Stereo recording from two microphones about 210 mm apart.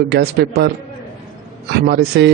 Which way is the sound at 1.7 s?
50° right (ahead or behind).